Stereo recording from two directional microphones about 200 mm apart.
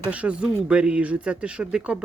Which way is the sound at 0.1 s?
5° right (ahead or behind).